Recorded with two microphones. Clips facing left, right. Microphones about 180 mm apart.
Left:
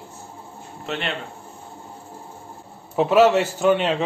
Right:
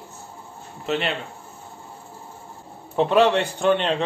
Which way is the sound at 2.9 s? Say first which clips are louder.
Left 2 dB; 5° left (ahead or behind).